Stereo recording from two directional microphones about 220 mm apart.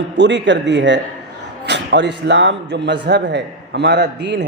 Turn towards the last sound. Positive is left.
turn(degrees=-50)  # may be behind; listen again after turning